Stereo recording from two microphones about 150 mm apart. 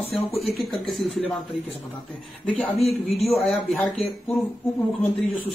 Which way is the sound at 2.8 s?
40° left (ahead or behind).